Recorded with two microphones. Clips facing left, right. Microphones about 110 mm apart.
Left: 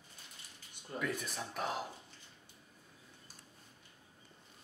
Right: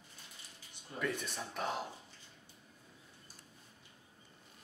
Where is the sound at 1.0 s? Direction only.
5° left (ahead or behind).